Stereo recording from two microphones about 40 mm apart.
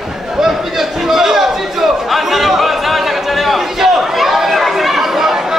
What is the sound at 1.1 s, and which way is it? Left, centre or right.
Chatter, centre.